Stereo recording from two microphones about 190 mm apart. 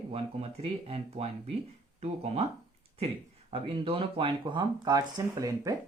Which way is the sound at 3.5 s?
30° right (ahead or behind).